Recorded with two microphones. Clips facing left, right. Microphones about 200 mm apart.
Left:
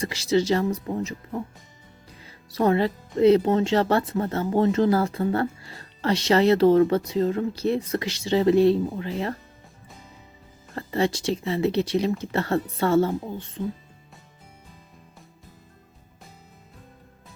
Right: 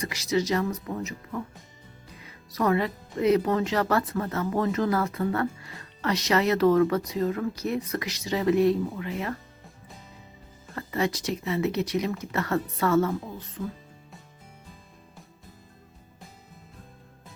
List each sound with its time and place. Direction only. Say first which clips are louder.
0.0 s speech: left 4 dB; 30° left (ahead or behind)
10.8 s speech: left 3 dB; 30° left (ahead or behind)